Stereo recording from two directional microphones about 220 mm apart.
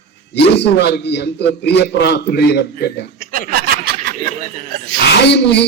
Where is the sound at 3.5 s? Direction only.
45° right (ahead or behind).